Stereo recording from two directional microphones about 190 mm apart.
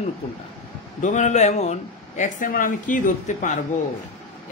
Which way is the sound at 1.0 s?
40° left (ahead or behind).